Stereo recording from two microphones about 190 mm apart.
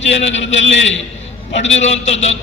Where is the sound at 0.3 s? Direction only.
75° left (ahead or behind).